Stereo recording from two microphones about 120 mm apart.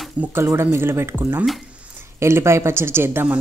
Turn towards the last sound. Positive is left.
turn(degrees=-20)  # may be behind; listen again after turning